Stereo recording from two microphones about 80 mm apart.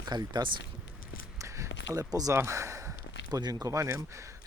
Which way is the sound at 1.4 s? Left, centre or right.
Right.